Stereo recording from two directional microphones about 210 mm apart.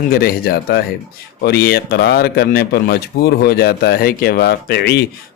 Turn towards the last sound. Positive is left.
turn(degrees=50)  # may be behind; listen again after turning